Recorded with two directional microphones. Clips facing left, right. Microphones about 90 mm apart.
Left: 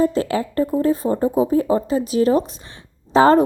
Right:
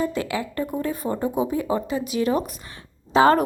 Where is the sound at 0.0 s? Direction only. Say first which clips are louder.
Left 6 dB; 35° left (ahead or behind).